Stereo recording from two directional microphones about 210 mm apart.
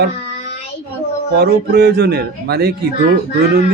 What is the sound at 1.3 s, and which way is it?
Speech, 50° right (ahead or behind).